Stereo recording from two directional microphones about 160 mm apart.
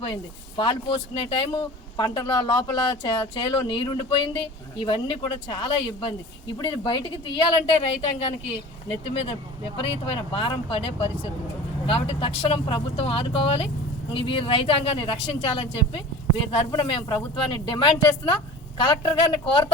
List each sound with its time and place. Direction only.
0.0 s speech: 30° left (ahead or behind)
9.7 s speech: 35° left (ahead or behind)